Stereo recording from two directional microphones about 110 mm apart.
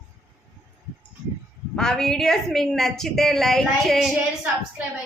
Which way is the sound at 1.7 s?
5° left (ahead or behind).